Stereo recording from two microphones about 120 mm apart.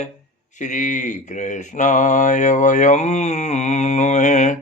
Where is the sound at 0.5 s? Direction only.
90° left.